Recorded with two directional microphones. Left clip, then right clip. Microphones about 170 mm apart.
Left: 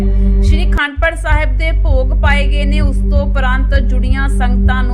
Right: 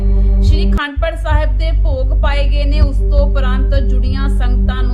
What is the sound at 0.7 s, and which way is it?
Speech, 20° left (ahead or behind).